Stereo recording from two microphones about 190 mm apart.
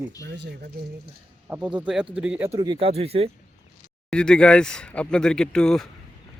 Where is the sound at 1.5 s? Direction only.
5° right (ahead or behind).